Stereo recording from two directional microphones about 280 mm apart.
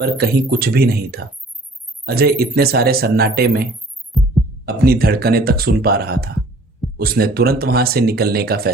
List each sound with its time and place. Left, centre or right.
0.0 s speech: right
4.1 s heart sounds: centre
4.6 s speech: right